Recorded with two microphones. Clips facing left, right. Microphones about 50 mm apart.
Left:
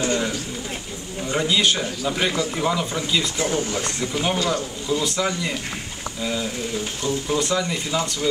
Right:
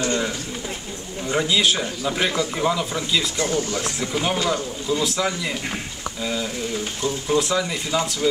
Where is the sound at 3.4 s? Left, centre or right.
Centre.